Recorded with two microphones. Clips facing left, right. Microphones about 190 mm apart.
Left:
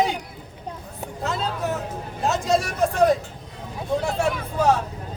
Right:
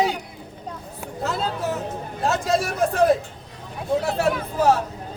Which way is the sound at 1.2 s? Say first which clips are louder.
Right 1 dB; centre (ahead or behind).